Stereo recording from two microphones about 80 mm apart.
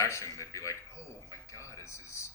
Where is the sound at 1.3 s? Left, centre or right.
Left.